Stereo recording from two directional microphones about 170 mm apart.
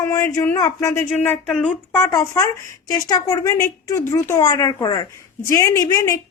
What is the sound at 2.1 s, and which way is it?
Child singing, 20° left (ahead or behind).